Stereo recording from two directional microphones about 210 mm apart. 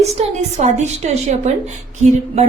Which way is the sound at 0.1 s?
30° right (ahead or behind).